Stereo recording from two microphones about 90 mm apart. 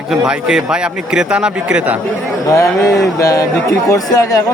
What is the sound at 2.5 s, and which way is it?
Speech, 35° left (ahead or behind).